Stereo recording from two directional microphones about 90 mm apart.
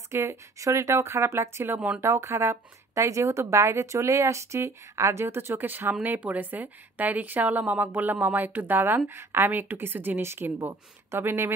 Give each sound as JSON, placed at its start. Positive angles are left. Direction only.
{"t": 0.1, "sound": "speech", "side_deg": -30}